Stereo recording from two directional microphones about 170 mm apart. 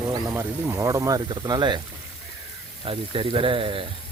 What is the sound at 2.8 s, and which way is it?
Speech, 30° right (ahead or behind).